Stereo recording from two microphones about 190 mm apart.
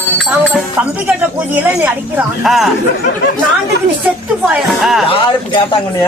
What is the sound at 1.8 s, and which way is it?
Speech, 5° right (ahead or behind).